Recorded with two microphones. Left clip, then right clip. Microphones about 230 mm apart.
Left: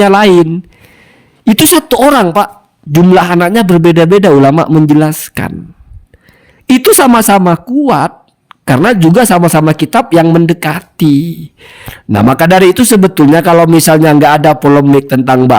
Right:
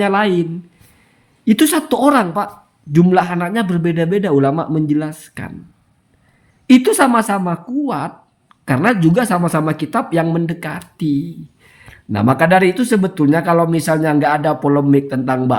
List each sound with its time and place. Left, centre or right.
0.0 s a woman's voice: left
1.5 s a woman's voice: left
6.7 s a woman's voice: left